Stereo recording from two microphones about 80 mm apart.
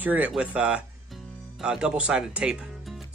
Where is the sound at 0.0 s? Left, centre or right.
Centre.